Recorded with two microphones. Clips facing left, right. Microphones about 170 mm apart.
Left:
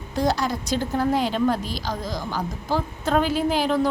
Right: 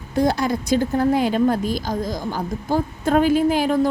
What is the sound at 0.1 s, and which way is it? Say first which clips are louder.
A woman's voice: right 4 dB; 55° right (ahead or behind).